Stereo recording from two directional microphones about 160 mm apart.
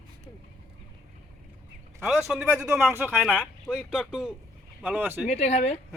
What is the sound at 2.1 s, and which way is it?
Speech, 5° right (ahead or behind).